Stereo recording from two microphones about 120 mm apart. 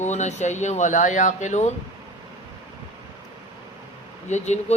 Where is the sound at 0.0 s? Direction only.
75° left (ahead or behind); by 1.7 s 90° left.